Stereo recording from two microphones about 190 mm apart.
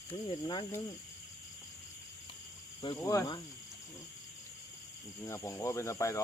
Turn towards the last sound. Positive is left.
turn(degrees=15)  # may be behind; listen again after turning